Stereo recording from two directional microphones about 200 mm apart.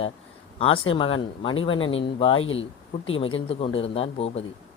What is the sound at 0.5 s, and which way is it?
Speech, 30° left (ahead or behind).